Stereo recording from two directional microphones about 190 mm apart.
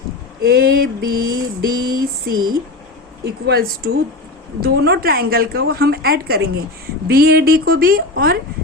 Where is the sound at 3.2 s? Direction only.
55° right (ahead or behind).